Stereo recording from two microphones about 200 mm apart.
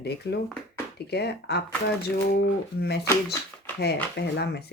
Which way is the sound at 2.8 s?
55° left (ahead or behind).